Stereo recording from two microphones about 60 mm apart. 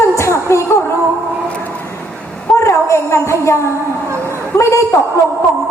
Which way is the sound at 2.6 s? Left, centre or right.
Left.